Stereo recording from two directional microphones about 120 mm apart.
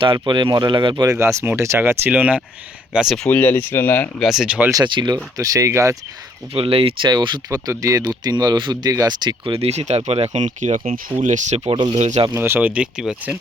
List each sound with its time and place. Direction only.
0.0 s speech: 40° right (ahead or behind)
1.0 s speech: 25° right (ahead or behind); by 3.2 s 5° right (ahead or behind)
3.2 s speech: 15° left (ahead or behind)
4.2 s speech: 5° right (ahead or behind)
4.7 s speech: 40° right (ahead or behind)
6.5 s speech: 50° right (ahead or behind)
7.1 s speech: 40° right (ahead or behind)
7.7 s speech: 25° right (ahead or behind); by 11.7 s 75° right (ahead or behind)
11.7 s speech: 45° right (ahead or behind)
11.9 s speech: 70° right (ahead or behind)
12.3 s speech: 15° right (ahead or behind)